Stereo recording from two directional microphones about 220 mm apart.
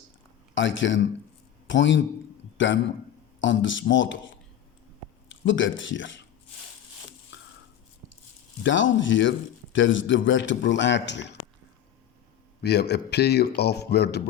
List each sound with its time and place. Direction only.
0.5 s a man's voice: 55° left (ahead or behind)
7.3 s a sound: 55° left (ahead or behind)
8.6 s a man's voice: 60° left (ahead or behind)
12.6 s speech: 50° left (ahead or behind)